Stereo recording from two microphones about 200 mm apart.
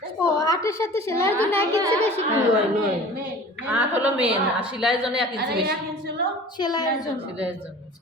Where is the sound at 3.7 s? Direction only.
10° right (ahead or behind).